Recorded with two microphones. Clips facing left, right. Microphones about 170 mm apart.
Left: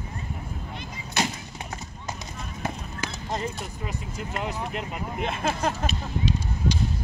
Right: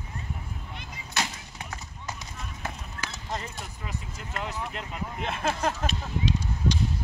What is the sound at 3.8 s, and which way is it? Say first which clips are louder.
Speech: left 5 dB; 15° left (ahead or behind).